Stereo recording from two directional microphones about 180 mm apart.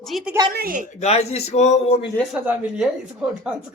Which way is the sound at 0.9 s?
35° left (ahead or behind).